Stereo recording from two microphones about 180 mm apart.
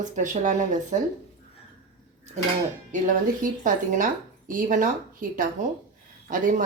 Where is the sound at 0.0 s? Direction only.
45° right (ahead or behind).